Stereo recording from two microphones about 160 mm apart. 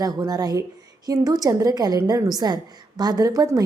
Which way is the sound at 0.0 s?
25° right (ahead or behind).